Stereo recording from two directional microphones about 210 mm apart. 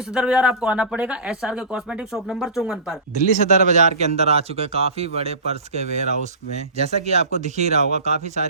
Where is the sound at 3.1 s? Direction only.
35° right (ahead or behind).